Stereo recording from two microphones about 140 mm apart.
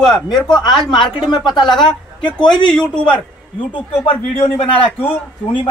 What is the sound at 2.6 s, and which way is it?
Speech, 5° left (ahead or behind).